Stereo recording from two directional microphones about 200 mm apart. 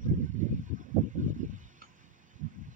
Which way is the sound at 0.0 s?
40° right (ahead or behind).